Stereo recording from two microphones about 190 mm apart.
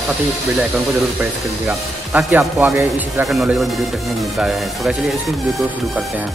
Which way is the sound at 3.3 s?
Centre (ahead or behind).